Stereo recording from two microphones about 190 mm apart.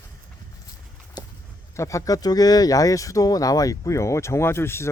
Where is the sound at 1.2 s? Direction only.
20° left (ahead or behind).